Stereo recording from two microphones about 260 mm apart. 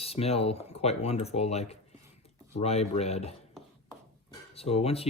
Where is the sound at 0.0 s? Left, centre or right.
Left.